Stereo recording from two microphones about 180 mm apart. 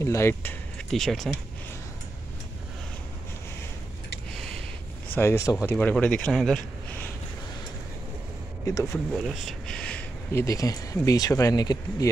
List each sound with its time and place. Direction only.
0.0 s speech: 15° left (ahead or behind)
4.4 s a sound: 5° left (ahead or behind)
5.1 s speech: 15° left (ahead or behind)
8.6 s speech: 15° left (ahead or behind)
9.1 s speech: centre (ahead or behind); by 12.1 s 20° left (ahead or behind)